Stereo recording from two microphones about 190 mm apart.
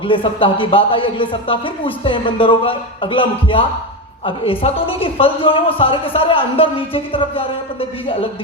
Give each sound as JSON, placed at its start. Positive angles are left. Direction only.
{"t": 0.0, "sound": "a woman's voice", "side_deg": 25}